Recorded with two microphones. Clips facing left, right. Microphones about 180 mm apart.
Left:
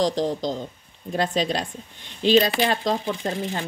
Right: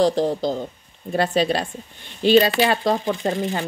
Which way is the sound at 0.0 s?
5° right (ahead or behind).